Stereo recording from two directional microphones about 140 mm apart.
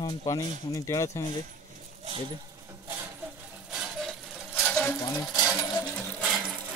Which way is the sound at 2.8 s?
20° right (ahead or behind).